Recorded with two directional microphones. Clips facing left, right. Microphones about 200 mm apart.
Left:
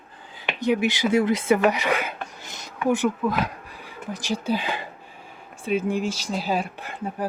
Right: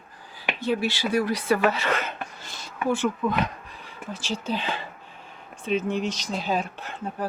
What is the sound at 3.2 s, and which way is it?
Speech, 5° left (ahead or behind).